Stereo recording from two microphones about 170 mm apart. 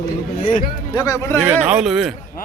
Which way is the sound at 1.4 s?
10° right (ahead or behind).